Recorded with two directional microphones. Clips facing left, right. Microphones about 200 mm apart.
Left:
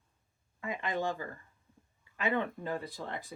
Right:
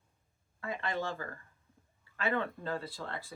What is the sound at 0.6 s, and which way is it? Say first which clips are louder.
Speech: left 2 dB; 15° left (ahead or behind).